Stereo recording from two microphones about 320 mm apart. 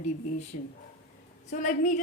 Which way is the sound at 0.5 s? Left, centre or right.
Left.